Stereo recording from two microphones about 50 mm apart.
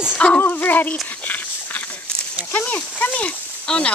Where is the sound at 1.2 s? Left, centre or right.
Left.